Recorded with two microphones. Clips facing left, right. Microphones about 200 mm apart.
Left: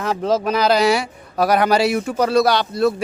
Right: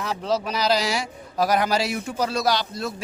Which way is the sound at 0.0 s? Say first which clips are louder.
Left 6 dB; 50° left (ahead or behind).